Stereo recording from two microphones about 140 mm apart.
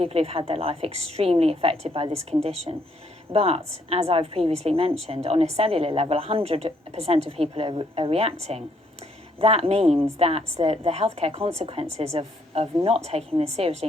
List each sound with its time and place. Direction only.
0.0 s a woman's voice: 45° right (ahead or behind)